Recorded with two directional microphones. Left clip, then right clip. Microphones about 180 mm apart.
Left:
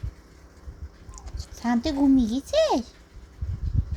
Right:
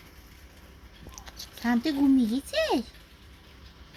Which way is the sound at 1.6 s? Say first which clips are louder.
Left 2 dB; 30° left (ahead or behind).